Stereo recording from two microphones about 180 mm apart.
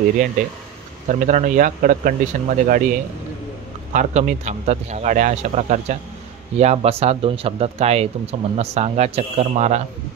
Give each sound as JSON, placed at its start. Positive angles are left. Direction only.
{"t": 1.0, "sound": "speech", "side_deg": -45}
{"t": 3.9, "sound": "speech", "side_deg": -45}